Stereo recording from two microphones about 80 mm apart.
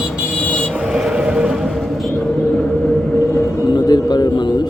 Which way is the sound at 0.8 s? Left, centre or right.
Centre.